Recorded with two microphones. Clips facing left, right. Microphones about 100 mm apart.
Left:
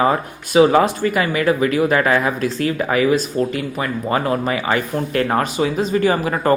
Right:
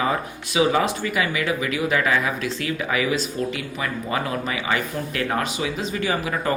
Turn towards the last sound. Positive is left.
turn(degrees=45)  # may be behind; listen again after turning